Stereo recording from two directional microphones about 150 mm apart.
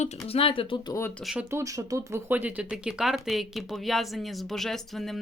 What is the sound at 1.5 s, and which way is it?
Speech, 20° right (ahead or behind).